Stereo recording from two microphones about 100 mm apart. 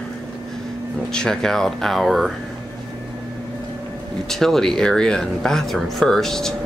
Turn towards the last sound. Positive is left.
turn(degrees=5)  # may be behind; listen again after turning